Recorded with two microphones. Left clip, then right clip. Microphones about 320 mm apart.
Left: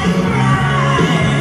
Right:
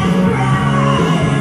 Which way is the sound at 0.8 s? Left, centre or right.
Left.